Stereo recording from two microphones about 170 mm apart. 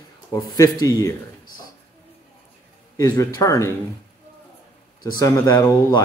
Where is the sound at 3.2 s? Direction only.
15° left (ahead or behind).